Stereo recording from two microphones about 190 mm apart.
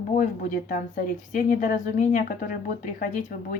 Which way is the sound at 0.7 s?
45° left (ahead or behind).